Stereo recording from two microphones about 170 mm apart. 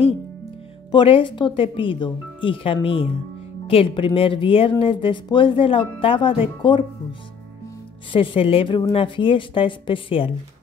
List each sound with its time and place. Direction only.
0.9 s speech: 30° left (ahead or behind)